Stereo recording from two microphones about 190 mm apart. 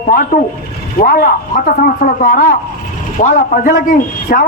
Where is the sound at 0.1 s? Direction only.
50° left (ahead or behind).